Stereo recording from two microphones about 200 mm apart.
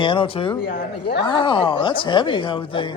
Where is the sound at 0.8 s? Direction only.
55° left (ahead or behind).